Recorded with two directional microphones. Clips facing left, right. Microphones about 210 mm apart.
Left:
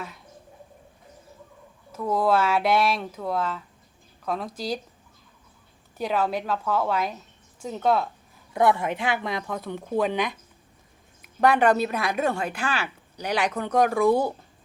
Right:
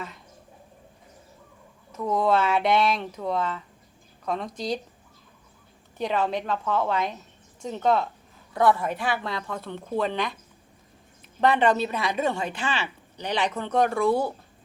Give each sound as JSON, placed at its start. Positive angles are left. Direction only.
{"t": 1.9, "sound": "speech", "side_deg": 5}
{"t": 6.0, "sound": "a woman's voice", "side_deg": 5}
{"t": 8.5, "sound": "a woman's voice", "side_deg": 20}